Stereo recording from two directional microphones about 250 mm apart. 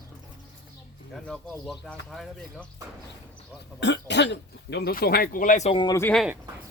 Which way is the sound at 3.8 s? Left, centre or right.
Left.